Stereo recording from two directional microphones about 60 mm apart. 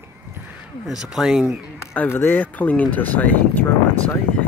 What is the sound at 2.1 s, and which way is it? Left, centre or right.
Speech, left.